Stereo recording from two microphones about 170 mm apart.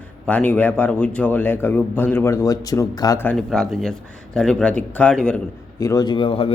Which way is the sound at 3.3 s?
Centre (ahead or behind).